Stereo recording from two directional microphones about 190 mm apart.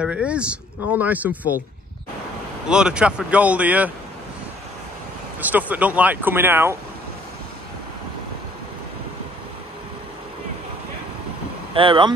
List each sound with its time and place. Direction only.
0.0 s speech: 5° right (ahead or behind)
2.7 s speech: 5° right (ahead or behind)
5.4 s speech: 10° right (ahead or behind)
11.7 s speech: 25° right (ahead or behind)